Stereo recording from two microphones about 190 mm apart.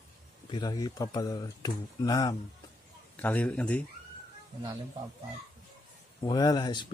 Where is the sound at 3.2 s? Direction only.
10° left (ahead or behind).